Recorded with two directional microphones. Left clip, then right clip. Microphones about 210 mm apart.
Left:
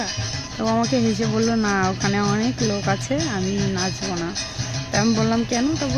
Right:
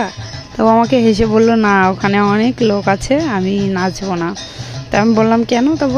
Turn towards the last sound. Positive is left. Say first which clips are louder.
# right 9 dB
turn(degrees=-40)  # may be behind; listen again after turning